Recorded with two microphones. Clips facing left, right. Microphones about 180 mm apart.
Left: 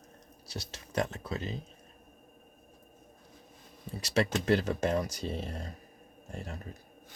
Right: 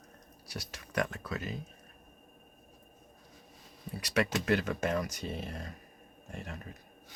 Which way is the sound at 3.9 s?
25° left (ahead or behind).